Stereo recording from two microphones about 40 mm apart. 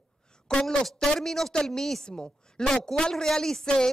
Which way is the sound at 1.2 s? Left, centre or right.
Centre.